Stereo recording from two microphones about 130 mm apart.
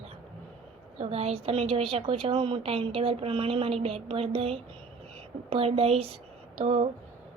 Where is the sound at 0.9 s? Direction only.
50° right (ahead or behind).